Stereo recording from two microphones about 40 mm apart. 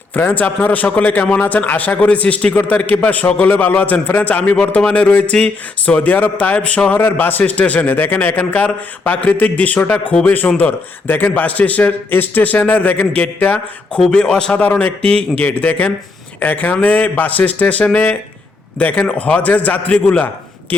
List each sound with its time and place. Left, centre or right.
0.1 s a man's voice: left
3.4 s a man's voice: left
6.0 s a man's voice: left
6.9 s a man's voice: left
7.7 s a man's voice: left
10.2 s a man's voice: left
11.4 s a man's voice: left
12.1 s a man's voice: left
14.1 s a man's voice: left
14.7 s a man's voice: left
15.4 s a man's voice: left
16.4 s a man's voice: left